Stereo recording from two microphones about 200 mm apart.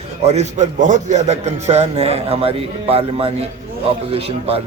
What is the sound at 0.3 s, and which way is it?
A man's voice, 35° right (ahead or behind).